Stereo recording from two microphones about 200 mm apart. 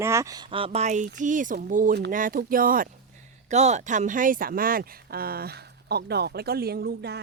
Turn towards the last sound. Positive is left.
turn(degrees=-55)  # may be behind; listen again after turning